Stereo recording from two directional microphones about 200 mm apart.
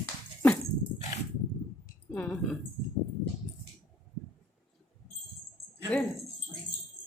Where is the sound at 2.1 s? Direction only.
5° left (ahead or behind).